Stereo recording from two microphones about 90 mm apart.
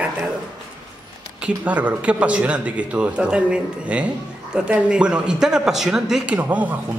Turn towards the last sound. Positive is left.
turn(degrees=-15)  # may be behind; listen again after turning